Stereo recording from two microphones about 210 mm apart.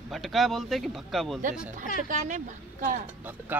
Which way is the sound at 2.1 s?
35° right (ahead or behind).